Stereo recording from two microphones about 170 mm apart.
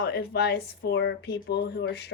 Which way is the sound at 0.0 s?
75° left (ahead or behind).